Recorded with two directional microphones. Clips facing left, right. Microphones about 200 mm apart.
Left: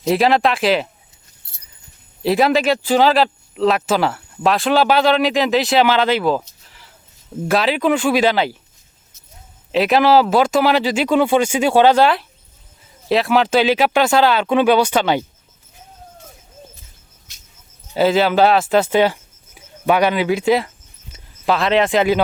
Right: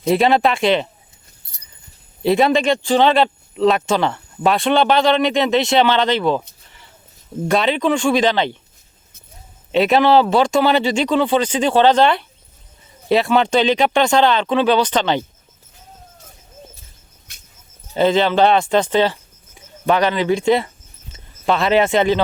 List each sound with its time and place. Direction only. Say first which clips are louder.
0.0 s speech: even; centre (ahead or behind)
2.2 s speech: even; centre (ahead or behind)
6.7 s a sound: even; centre (ahead or behind)
7.4 s speech: even; 5° left (ahead or behind)
9.7 s speech: even; centre (ahead or behind)
17.3 s a sound: right 2 dB; 55° right (ahead or behind)
17.9 s speech: even; 5° left (ahead or behind)